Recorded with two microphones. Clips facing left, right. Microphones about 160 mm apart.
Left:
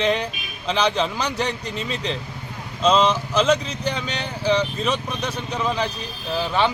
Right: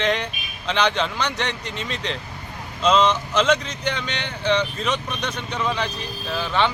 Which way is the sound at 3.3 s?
10° left (ahead or behind).